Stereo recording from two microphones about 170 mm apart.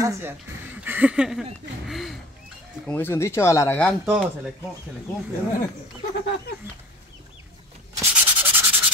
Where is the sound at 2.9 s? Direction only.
10° left (ahead or behind).